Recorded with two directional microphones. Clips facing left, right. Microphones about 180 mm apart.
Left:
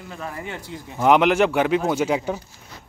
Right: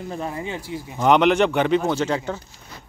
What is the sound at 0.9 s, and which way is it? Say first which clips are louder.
Speech: even; 5° left (ahead or behind).